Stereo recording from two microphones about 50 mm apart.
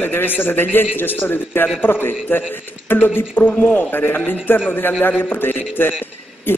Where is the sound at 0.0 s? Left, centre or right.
Left.